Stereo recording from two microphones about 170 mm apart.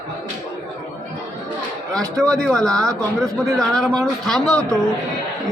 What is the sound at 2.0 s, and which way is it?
Speech, 20° right (ahead or behind).